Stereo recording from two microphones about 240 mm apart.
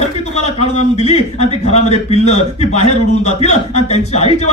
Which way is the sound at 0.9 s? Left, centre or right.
Left.